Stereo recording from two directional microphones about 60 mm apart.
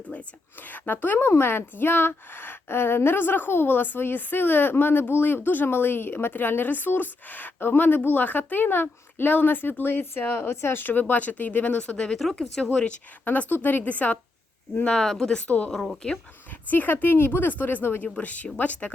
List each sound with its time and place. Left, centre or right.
0.1 s a sound: left
1.3 s a woman's voice: left; by 12.8 s centre
13.2 s a woman's voice: left
14.8 s speech: centre
15.7 s speech: centre
16.6 s a woman's voice: left
18.0 s a woman's voice: left